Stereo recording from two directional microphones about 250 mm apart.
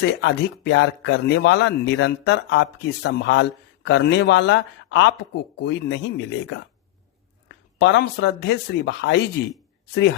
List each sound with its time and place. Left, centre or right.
0.0 s speech: left